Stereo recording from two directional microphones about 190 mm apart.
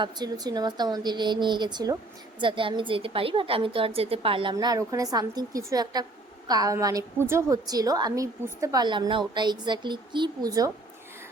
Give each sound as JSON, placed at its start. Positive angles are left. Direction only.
{"t": 0.0, "sound": "a woman's voice", "side_deg": -20}
{"t": 4.5, "sound": "a woman's voice", "side_deg": -20}